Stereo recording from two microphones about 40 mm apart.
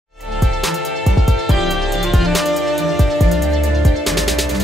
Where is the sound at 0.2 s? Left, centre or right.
Centre.